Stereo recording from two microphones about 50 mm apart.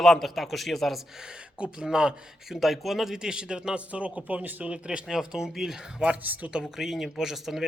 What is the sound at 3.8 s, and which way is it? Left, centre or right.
Speech, right.